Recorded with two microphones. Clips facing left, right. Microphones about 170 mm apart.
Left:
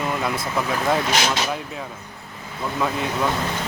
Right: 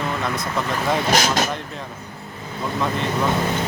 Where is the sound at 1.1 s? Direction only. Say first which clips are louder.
Right 3 dB; 45° right (ahead or behind).